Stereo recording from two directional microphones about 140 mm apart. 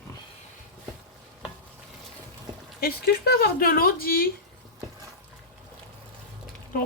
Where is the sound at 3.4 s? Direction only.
90° left.